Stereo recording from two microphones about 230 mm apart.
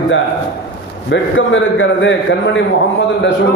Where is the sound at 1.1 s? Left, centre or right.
Left.